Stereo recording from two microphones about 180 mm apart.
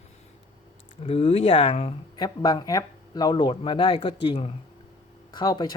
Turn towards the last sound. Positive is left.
turn(degrees=20)  # may be behind; listen again after turning